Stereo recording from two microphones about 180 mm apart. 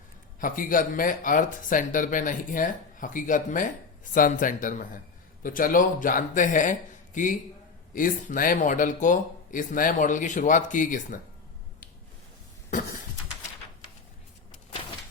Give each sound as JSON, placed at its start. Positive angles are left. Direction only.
{"t": 0.3, "sound": "speech", "side_deg": 50}